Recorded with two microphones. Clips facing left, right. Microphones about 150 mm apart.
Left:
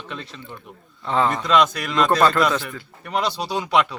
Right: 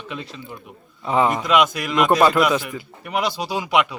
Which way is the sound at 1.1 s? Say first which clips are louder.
Right 1 dB; 15° right (ahead or behind).